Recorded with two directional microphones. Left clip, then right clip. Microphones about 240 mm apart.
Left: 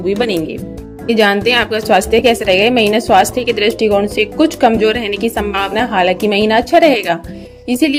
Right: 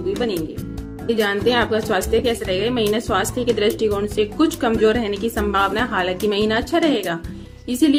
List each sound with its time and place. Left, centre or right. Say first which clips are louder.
1.0 s a woman's voice: left 7 dB; left